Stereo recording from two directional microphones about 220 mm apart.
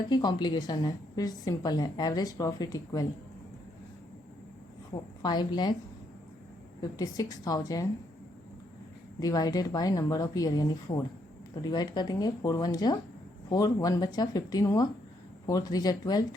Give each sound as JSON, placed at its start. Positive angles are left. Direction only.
{"t": 0.1, "sound": "a woman's voice", "side_deg": 20}
{"t": 5.2, "sound": "a woman's voice", "side_deg": 20}
{"t": 6.9, "sound": "a woman's voice", "side_deg": 15}
{"t": 9.2, "sound": "a woman's voice", "side_deg": 15}